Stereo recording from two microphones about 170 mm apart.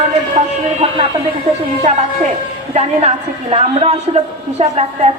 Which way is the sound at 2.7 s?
40° right (ahead or behind).